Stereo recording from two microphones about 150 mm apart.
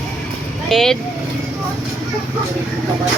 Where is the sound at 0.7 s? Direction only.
Centre (ahead or behind).